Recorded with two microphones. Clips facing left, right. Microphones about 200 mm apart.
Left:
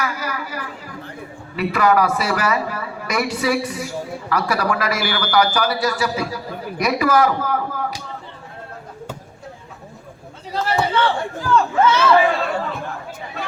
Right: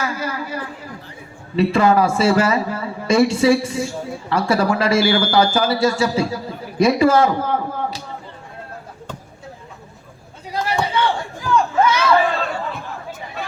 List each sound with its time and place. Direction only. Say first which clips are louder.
0.0 s a sound: right 2 dB; 25° right (ahead or behind)
1.5 s speech: right 2 dB; 25° right (ahead or behind)
10.5 s chop: left 1 dB; 15° right (ahead or behind)
11.5 s speech: even; 10° right (ahead or behind)